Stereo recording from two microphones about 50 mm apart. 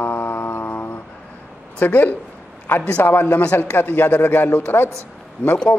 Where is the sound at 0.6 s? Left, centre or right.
Left.